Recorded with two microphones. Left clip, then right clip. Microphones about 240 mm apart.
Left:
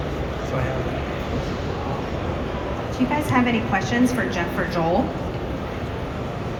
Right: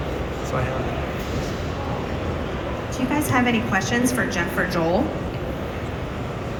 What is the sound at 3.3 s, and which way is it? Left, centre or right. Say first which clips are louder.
A woman's voice: right 1 dB; right.